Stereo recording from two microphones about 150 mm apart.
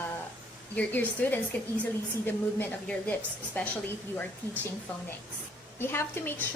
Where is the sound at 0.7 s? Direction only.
10° left (ahead or behind).